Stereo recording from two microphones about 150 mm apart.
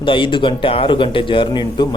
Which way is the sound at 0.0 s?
35° left (ahead or behind).